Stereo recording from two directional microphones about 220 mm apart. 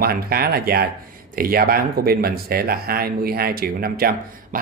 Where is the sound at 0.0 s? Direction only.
45° right (ahead or behind).